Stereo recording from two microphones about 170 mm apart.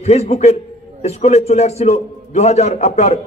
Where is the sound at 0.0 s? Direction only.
40° left (ahead or behind).